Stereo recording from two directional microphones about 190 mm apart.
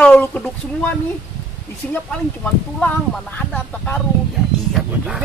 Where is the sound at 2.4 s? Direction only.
5° left (ahead or behind).